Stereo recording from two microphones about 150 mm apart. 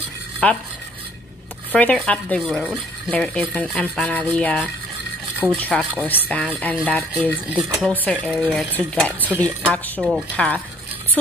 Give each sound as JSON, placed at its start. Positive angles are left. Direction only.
{"t": 0.4, "sound": "speech", "side_deg": 5}
{"t": 1.7, "sound": "speech", "side_deg": 10}
{"t": 7.5, "sound": "speech", "side_deg": -5}
{"t": 8.0, "sound": "speech", "side_deg": 10}